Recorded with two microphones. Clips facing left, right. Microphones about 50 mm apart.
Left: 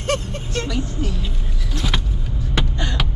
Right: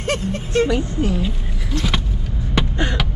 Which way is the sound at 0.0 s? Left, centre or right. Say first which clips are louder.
Right 1 dB; centre.